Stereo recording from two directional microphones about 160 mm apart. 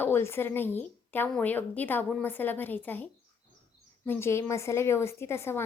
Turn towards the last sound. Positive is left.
turn(degrees=15)  # may be behind; listen again after turning